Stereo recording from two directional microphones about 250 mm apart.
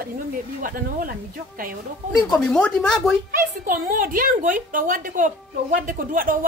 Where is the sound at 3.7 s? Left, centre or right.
Right.